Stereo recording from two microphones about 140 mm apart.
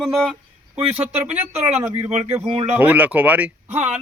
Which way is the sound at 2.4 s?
35° right (ahead or behind).